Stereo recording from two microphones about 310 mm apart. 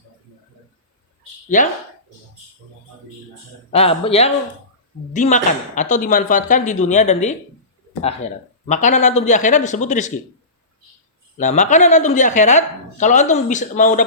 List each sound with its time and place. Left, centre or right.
3.7 s a woman's voice: centre
11.3 s a woman's voice: left